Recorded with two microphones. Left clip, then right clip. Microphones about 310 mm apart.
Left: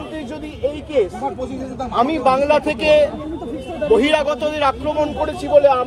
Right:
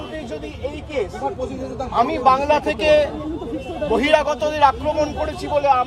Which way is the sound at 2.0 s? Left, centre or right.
Centre.